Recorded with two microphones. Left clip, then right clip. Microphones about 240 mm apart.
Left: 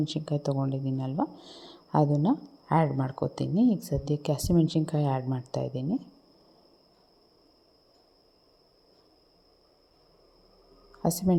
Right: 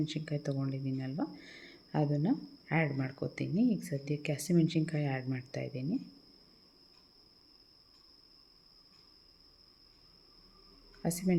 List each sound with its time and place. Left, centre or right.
0.0 s speech: left
2.3 s speech: centre
3.2 s speech: left
11.0 s speech: left